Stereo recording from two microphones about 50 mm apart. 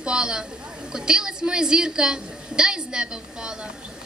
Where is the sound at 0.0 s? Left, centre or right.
Centre.